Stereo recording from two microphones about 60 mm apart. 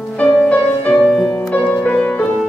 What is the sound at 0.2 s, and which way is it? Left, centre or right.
Music, left.